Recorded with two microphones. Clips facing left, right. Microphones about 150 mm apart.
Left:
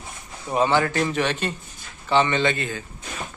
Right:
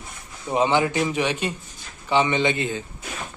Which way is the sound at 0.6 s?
15° right (ahead or behind).